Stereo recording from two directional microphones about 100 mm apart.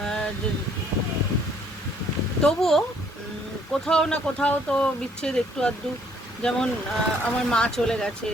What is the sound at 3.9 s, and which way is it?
Speech, 10° left (ahead or behind).